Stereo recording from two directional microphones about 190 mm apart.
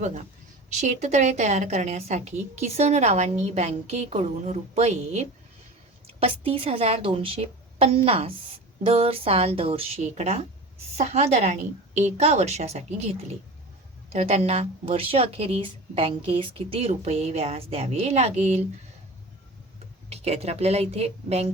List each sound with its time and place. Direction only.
0.7 s a woman's voice: 35° right (ahead or behind)
20.1 s a woman's voice: 35° right (ahead or behind)